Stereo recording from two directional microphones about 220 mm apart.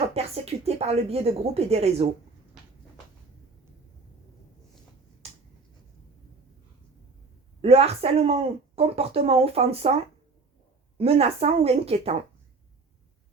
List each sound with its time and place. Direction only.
0.1 s speech: 25° right (ahead or behind)
5.2 s finger snapping: 30° right (ahead or behind)
7.6 s speech: 25° right (ahead or behind)